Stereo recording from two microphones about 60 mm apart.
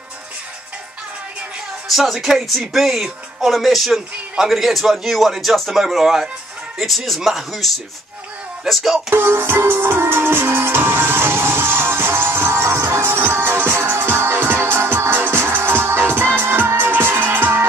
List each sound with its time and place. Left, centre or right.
1.9 s speech: centre
9.1 s music: right